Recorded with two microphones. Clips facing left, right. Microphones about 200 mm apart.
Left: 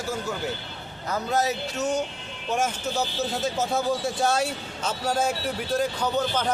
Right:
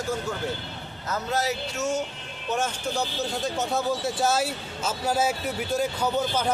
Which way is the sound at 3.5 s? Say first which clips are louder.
Even; centre (ahead or behind).